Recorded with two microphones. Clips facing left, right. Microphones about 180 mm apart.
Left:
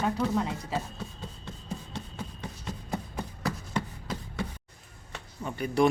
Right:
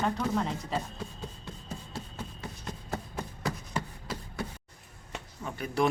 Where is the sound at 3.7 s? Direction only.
5° right (ahead or behind).